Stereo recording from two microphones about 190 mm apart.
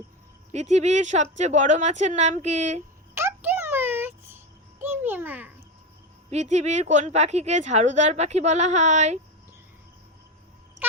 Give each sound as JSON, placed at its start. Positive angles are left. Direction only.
{"t": 0.5, "sound": "a woman's voice", "side_deg": -35}
{"t": 3.2, "sound": "a sound", "side_deg": -10}
{"t": 4.8, "sound": "a child's voice", "side_deg": -10}
{"t": 6.3, "sound": "a woman's voice", "side_deg": -35}